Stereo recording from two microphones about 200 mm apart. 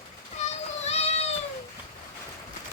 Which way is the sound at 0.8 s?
30° left (ahead or behind).